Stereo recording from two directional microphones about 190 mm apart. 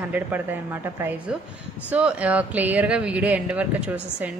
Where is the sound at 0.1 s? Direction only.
10° right (ahead or behind).